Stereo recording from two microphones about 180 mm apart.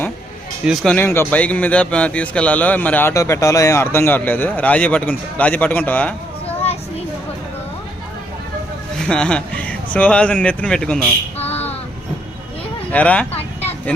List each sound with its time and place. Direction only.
0.6 s speech: centre (ahead or behind)
0.9 s speech: 10° left (ahead or behind)
9.0 s speech: 5° left (ahead or behind)
12.9 s speech: 5° left (ahead or behind)
13.3 s vehicle: 35° left (ahead or behind)